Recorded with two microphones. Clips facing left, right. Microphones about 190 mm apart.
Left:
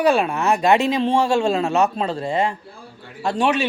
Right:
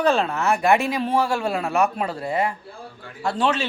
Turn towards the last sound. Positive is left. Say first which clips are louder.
# left 3 dB
turn(degrees=15)  # may be behind; listen again after turning